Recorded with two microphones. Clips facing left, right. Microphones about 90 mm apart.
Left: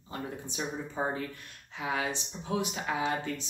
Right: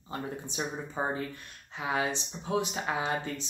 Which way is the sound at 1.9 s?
25° right (ahead or behind).